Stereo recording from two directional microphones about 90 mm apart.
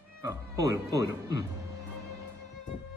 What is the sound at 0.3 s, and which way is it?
Speech, 40° right (ahead or behind).